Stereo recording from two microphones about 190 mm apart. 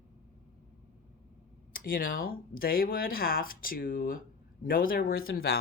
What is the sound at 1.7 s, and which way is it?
Speech, 50° left (ahead or behind).